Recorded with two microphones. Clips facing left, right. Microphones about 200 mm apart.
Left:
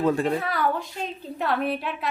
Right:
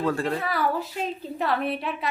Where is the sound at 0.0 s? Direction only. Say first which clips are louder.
Left 3 dB; 20° left (ahead or behind).